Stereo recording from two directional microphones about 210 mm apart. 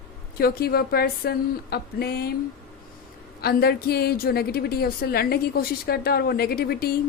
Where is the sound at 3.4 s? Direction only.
50° left (ahead or behind).